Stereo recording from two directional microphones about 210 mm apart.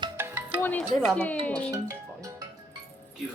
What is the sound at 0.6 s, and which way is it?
Speech, 5° left (ahead or behind).